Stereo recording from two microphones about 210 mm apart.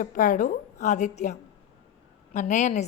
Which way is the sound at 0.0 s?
40° left (ahead or behind).